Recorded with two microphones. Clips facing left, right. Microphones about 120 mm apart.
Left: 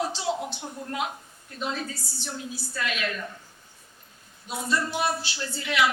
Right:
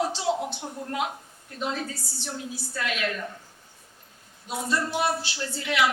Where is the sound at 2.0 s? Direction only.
75° right (ahead or behind).